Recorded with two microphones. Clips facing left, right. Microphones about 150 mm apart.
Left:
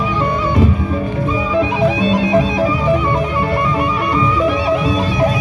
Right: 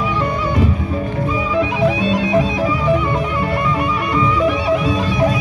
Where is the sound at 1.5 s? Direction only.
30° left (ahead or behind).